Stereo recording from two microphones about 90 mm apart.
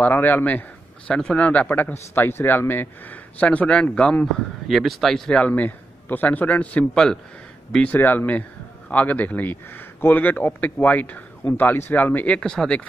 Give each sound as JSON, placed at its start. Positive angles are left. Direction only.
{"t": 0.0, "sound": "speech", "side_deg": 25}
{"t": 5.4, "sound": "a man's voice", "side_deg": 20}
{"t": 7.9, "sound": "a man's voice", "side_deg": 20}
{"t": 12.4, "sound": "speech", "side_deg": 10}